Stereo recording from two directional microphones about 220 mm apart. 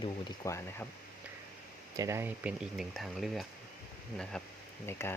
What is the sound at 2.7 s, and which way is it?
Speech, centre (ahead or behind).